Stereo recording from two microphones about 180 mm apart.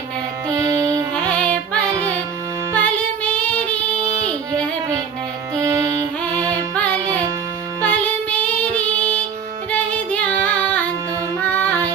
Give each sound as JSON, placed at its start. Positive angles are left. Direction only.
{"t": 0.4, "sound": "music", "side_deg": -20}
{"t": 1.3, "sound": "music", "side_deg": 5}
{"t": 4.2, "sound": "child singing", "side_deg": 5}
{"t": 5.5, "sound": "music", "side_deg": -15}
{"t": 6.5, "sound": "music", "side_deg": 5}
{"t": 9.7, "sound": "child singing", "side_deg": 10}
{"t": 11.3, "sound": "music", "side_deg": 5}